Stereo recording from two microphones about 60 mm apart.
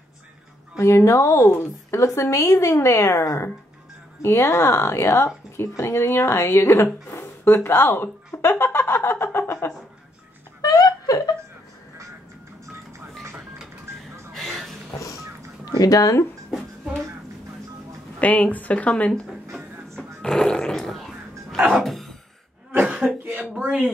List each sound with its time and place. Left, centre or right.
0.7 s speech: left
1.5 s speech: left
2.4 s speech: left
10.6 s a sound: left
14.3 s a sound: centre
15.8 s speech: left
18.2 s speech: left
20.0 s fart: centre
21.5 s a sound: centre
21.8 s a sound: centre
22.7 s cough: right
23.6 s speech: right